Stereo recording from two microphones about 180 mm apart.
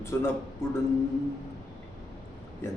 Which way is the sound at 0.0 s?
15° left (ahead or behind).